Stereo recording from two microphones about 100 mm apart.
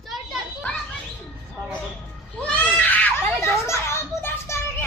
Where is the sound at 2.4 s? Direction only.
15° left (ahead or behind).